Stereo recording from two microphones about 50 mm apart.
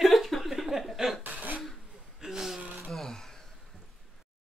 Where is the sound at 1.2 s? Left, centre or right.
Right.